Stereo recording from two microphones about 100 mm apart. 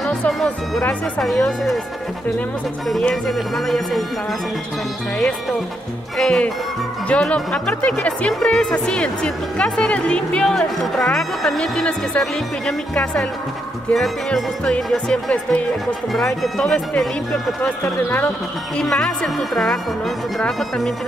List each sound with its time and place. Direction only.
0.3 s speech: centre (ahead or behind)
2.9 s speech: 5° left (ahead or behind)
6.1 s speech: 5° left (ahead or behind)
17.6 s speech: 15° left (ahead or behind)
18.8 s speech: 5° left (ahead or behind)